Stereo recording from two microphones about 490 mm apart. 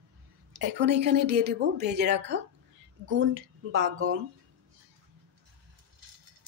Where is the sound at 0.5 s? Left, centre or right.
Right.